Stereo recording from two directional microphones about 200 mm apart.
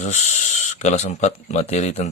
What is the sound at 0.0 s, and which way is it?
Speech, 40° left (ahead or behind).